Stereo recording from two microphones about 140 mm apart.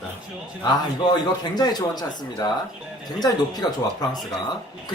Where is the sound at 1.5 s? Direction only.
30° left (ahead or behind).